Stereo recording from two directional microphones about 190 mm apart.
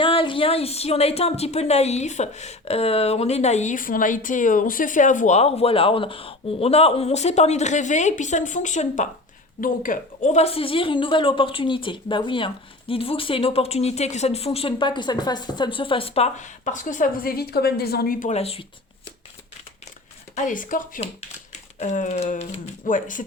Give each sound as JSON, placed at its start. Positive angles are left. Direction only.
{"t": 0.0, "sound": "a woman's voice", "side_deg": 25}
{"t": 20.3, "sound": "speech", "side_deg": 45}